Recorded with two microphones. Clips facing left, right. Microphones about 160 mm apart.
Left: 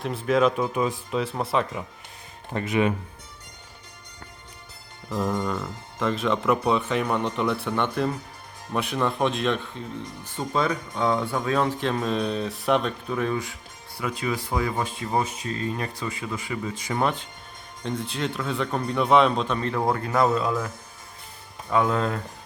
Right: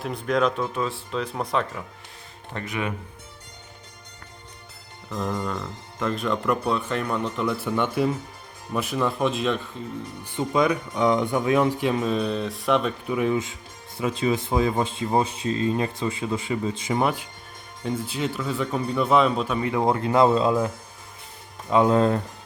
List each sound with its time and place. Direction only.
0.0 s speech: 5° left (ahead or behind)
2.5 s speech: 20° left (ahead or behind)
5.1 s speech: 5° left (ahead or behind)
10.2 s speech: 15° right (ahead or behind); by 12.9 s centre (ahead or behind)
13.1 s speech: 15° right (ahead or behind)
16.9 s speech: 10° right (ahead or behind); by 22.2 s 30° right (ahead or behind)